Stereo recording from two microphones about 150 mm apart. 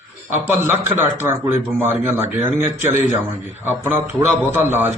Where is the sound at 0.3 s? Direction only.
15° right (ahead or behind).